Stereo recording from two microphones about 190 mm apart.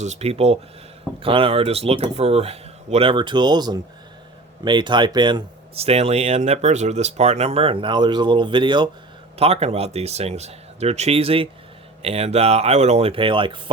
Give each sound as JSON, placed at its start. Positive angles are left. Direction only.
{"t": 0.0, "sound": "speech", "side_deg": -35}